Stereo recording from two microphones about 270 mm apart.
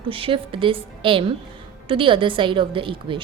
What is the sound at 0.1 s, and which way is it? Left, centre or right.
A woman's voice, centre.